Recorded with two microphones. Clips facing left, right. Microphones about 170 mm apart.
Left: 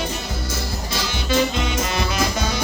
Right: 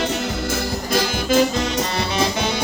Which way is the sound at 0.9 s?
45° right (ahead or behind).